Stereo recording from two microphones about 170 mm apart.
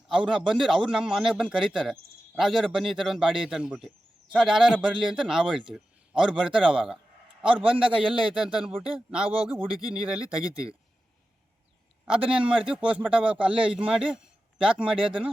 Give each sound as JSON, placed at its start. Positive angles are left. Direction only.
{"t": 0.1, "sound": "a man's voice", "side_deg": -5}
{"t": 12.2, "sound": "a man's voice", "side_deg": -30}
{"t": 12.5, "sound": "a man's voice", "side_deg": -5}